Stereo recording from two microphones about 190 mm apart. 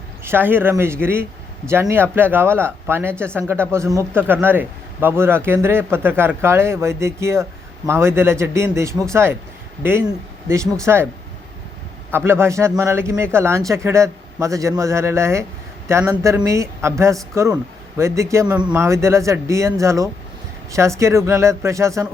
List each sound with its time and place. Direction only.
0.3 s speech: 10° right (ahead or behind)
12.1 s speech: 10° right (ahead or behind)